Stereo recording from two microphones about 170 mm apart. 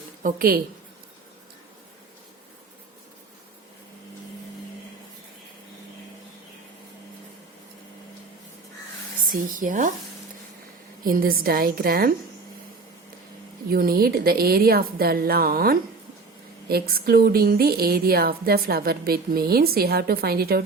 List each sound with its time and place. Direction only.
0.2 s speech: 55° right (ahead or behind)
9.3 s speech: 50° right (ahead or behind)
11.0 s speech: 55° right (ahead or behind)
13.7 s speech: 60° right (ahead or behind)